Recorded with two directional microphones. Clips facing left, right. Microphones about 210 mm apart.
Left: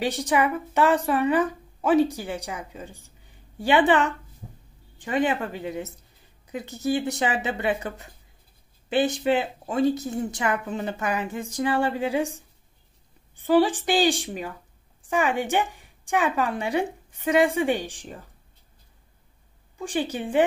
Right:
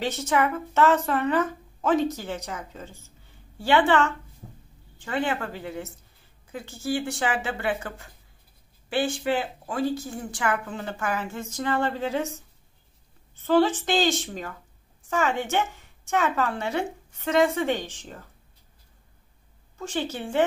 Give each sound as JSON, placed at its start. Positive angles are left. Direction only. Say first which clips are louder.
{"t": 0.0, "sound": "a woman's voice", "louder": "left 1 dB", "side_deg": 15}
{"t": 13.4, "sound": "a woman's voice", "louder": "left 1 dB", "side_deg": 15}
{"t": 19.8, "sound": "a woman's voice", "louder": "left 3 dB", "side_deg": 15}